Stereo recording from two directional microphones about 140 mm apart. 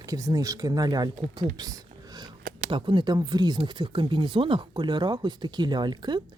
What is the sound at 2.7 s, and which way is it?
Speech, 35° right (ahead or behind).